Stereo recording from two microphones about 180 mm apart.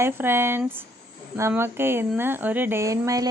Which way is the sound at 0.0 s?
15° right (ahead or behind).